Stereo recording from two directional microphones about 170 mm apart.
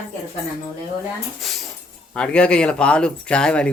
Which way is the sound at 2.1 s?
5° left (ahead or behind).